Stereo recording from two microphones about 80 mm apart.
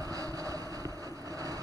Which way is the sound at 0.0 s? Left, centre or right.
Right.